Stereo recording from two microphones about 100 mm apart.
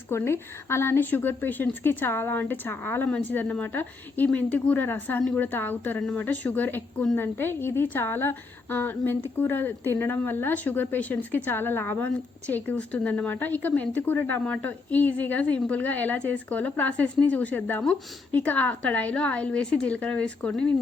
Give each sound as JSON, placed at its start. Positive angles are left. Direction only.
{"t": 0.1, "sound": "a woman's voice", "side_deg": 25}